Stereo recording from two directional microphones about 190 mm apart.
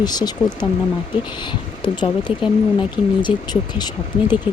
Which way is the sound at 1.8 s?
25° left (ahead or behind).